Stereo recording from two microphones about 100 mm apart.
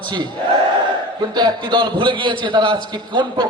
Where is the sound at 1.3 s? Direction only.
45° right (ahead or behind).